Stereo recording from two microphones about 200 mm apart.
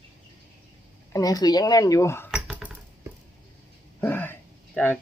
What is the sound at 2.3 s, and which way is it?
Dishes, 5° right (ahead or behind).